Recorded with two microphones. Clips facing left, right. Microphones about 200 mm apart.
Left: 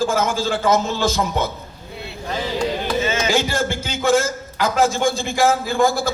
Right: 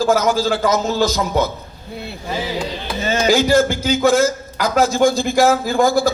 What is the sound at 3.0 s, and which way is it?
A man's voice, 35° right (ahead or behind).